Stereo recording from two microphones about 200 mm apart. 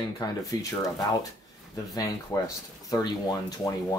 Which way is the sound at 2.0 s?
15° left (ahead or behind).